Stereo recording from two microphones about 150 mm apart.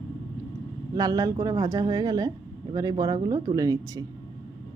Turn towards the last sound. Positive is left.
turn(degrees=-25)  # may be behind; listen again after turning